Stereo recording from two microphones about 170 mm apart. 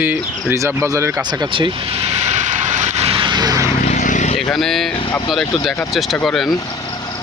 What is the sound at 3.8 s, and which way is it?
Vehicle, 45° left (ahead or behind).